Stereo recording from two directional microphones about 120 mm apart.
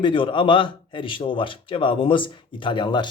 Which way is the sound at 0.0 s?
45° left (ahead or behind).